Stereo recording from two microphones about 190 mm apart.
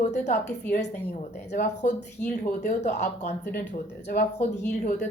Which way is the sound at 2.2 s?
40° left (ahead or behind).